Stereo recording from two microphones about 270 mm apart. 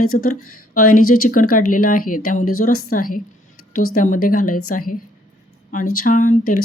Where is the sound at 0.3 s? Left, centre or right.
Left.